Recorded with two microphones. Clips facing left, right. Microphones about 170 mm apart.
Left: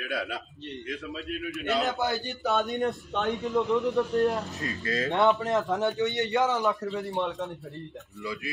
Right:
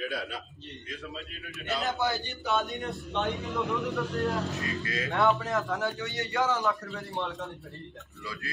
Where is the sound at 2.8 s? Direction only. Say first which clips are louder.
Left 4 dB; 45° left (ahead or behind).